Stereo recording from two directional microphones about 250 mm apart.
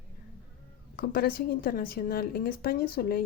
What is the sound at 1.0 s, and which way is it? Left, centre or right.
Speech, left.